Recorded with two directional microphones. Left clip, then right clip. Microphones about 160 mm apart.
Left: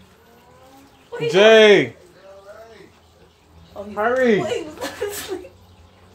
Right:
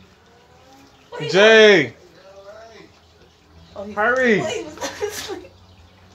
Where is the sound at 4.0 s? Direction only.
5° left (ahead or behind).